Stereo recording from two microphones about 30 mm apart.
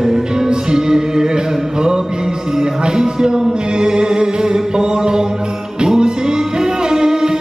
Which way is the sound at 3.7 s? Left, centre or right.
Right.